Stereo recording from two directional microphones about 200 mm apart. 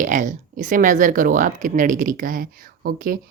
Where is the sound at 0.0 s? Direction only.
40° right (ahead or behind).